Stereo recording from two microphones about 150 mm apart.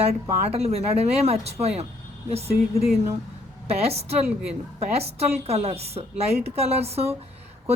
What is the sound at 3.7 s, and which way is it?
A woman's voice, 40° right (ahead or behind).